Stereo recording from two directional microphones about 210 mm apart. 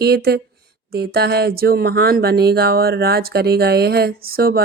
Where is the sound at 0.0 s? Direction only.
50° right (ahead or behind).